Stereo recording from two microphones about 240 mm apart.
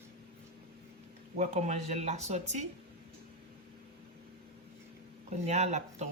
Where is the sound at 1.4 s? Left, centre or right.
Right.